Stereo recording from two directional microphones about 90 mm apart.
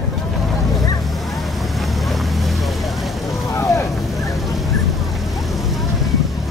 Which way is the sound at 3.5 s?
35° left (ahead or behind).